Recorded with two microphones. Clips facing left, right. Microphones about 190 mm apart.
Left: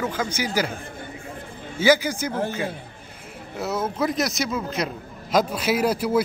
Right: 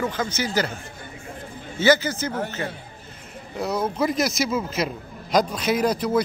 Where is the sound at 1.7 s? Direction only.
10° left (ahead or behind).